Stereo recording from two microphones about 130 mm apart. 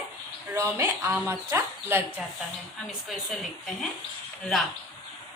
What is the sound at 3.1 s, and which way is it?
Speech, centre (ahead or behind).